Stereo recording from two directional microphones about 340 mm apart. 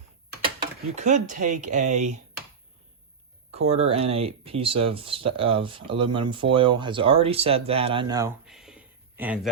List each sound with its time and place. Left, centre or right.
0.9 s speech: right
3.5 s speech: centre